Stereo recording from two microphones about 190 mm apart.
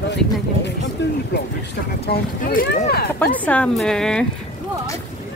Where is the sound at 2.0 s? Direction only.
50° left (ahead or behind).